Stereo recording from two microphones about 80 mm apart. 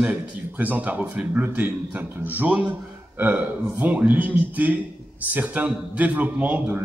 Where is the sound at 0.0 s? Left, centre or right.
Centre.